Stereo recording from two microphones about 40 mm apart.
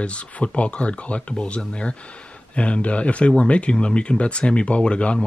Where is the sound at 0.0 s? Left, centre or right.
Left.